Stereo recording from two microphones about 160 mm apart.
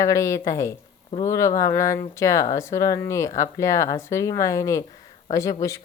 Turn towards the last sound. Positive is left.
turn(degrees=20)  # may be behind; listen again after turning